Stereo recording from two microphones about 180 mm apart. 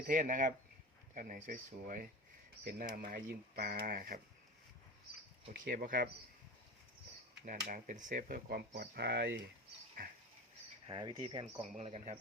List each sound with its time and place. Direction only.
0.1 s speech: 45° right (ahead or behind)
5.5 s speech: 50° right (ahead or behind)
7.4 s speech: 50° right (ahead or behind); by 9.4 s 65° right (ahead or behind)
10.8 s speech: 25° right (ahead or behind)
11.6 s speech: 40° right (ahead or behind)